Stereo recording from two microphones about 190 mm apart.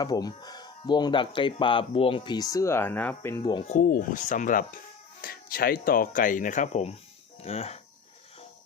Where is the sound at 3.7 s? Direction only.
45° left (ahead or behind).